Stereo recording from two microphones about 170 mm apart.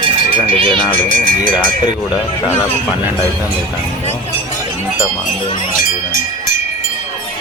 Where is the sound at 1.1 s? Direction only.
50° right (ahead or behind).